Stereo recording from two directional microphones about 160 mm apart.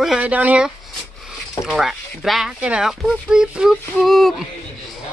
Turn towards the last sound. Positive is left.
turn(degrees=0)  # may be behind; listen again after turning